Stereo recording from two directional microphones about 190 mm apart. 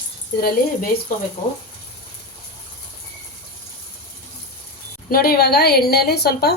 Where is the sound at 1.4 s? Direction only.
40° left (ahead or behind).